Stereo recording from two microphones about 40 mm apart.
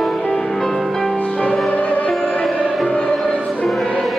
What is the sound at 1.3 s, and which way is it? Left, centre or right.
Music, left.